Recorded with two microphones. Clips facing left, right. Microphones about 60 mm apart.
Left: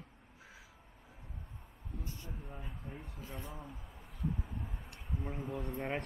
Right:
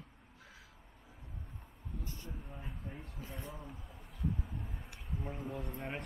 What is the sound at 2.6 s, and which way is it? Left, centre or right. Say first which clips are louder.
Speech: even; centre.